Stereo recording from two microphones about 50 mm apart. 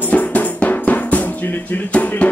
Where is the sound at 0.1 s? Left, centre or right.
Left.